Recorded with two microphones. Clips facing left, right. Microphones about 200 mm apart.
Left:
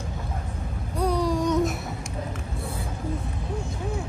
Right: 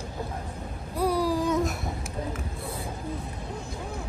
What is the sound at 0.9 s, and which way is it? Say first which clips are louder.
Babbling: left 1 dB; 5° right (ahead or behind).